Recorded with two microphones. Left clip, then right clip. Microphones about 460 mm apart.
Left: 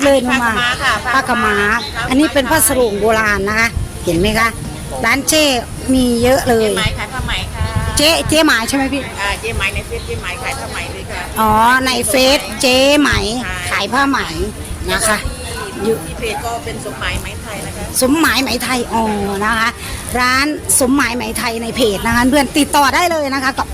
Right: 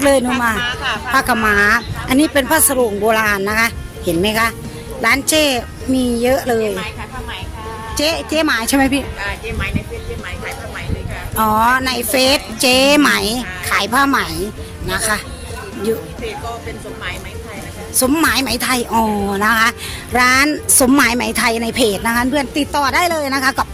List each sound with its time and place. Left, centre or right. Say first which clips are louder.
0.3 s speech: left 3 dB; right
1.1 s a woman's voice: right 4 dB; right
6.7 s a woman's voice: left 7 dB; right
7.9 s a woman's voice: left 5 dB; right
9.2 s a woman's voice: left 5 dB; right
14.8 s a woman's voice: left 3 dB; right
17.9 s speech: left 2 dB; right